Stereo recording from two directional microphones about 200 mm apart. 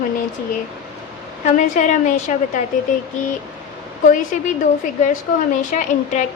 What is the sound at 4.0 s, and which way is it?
Speech, 40° left (ahead or behind).